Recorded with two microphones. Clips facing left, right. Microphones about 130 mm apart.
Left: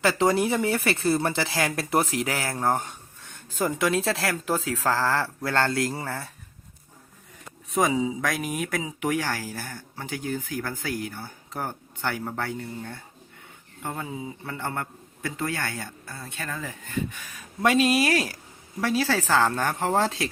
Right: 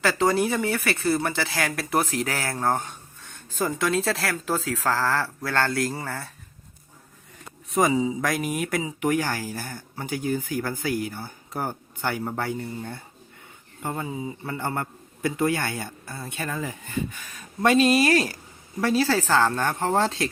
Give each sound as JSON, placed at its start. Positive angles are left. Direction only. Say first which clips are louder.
{"t": 0.0, "sound": "speech", "louder": "even", "side_deg": 20}
{"t": 7.7, "sound": "a man's voice", "louder": "right 2 dB", "side_deg": 0}
{"t": 17.1, "sound": "speech", "louder": "even", "side_deg": 5}